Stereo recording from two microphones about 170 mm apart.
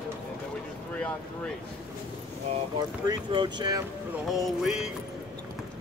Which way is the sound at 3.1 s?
25° right (ahead or behind).